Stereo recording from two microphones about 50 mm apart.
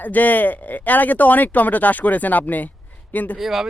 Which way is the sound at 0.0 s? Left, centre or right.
Left.